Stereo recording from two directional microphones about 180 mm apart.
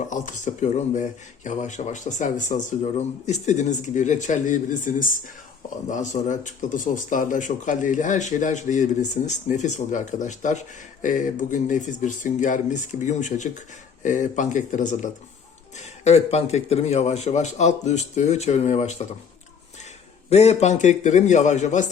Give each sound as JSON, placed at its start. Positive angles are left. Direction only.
{"t": 0.1, "sound": "a man's voice", "side_deg": 45}
{"t": 20.3, "sound": "a man's voice", "side_deg": 35}